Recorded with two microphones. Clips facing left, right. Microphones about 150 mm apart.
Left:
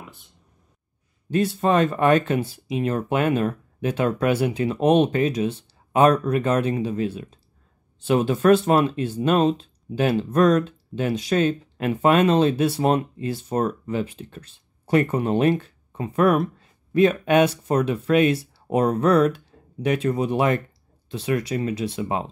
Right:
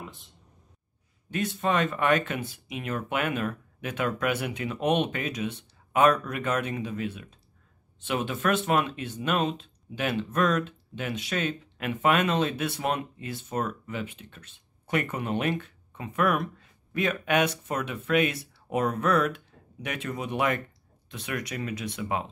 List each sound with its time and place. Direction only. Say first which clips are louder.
1.3 s speech: left 7 dB; 35° left (ahead or behind)